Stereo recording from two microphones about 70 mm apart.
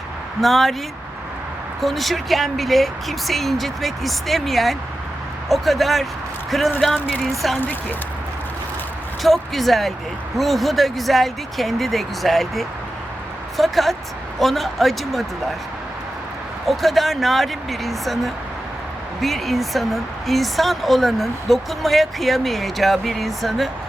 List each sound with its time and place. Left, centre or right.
0.4 s speech: centre
1.8 s speech: centre
7.6 s speech: left
9.2 s speech: centre
16.6 s speech: centre